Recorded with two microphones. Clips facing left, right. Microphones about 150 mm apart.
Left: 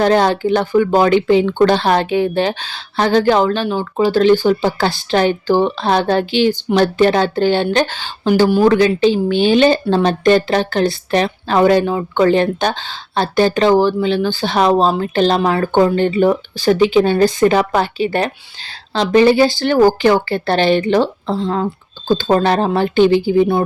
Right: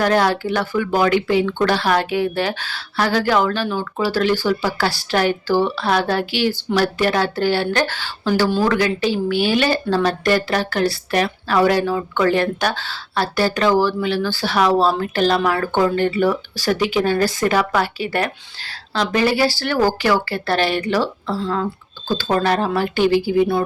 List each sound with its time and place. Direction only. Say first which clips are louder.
0.0 s a woman's voice: left 4 dB; 25° left (ahead or behind)
21.4 s a woman's voice: left 3 dB; 30° left (ahead or behind)